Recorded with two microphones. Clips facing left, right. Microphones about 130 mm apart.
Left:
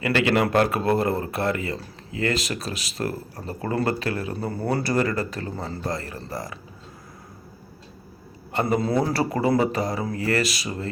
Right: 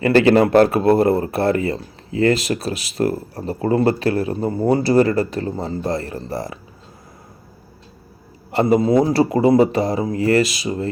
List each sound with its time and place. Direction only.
0.0 s speech: 35° right (ahead or behind)
8.8 s speech: 20° right (ahead or behind)